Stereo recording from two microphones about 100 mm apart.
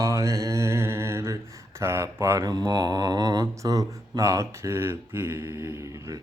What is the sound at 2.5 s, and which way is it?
Mantra, 45° right (ahead or behind).